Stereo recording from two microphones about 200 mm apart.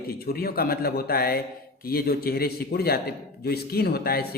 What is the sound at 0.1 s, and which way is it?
Speech, 50° left (ahead or behind).